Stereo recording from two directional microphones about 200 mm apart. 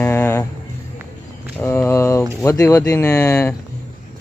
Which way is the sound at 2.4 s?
15° left (ahead or behind).